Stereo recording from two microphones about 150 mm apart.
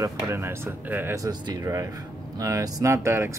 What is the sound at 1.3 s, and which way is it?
Speech, 25° right (ahead or behind).